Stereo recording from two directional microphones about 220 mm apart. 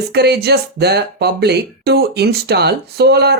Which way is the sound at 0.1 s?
50° right (ahead or behind).